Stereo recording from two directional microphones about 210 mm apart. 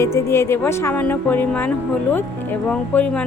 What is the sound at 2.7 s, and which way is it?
Speech, 5° left (ahead or behind).